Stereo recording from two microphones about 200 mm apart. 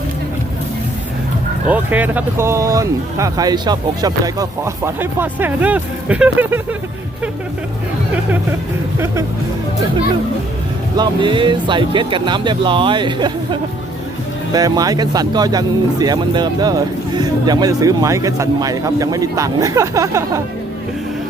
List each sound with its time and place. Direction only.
1.7 s speech: 10° right (ahead or behind)
10.9 s speech: 20° right (ahead or behind)